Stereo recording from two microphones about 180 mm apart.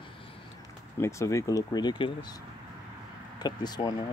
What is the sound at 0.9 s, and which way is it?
Speech, 15° left (ahead or behind).